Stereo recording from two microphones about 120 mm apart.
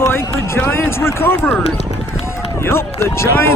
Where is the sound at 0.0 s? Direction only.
20° left (ahead or behind).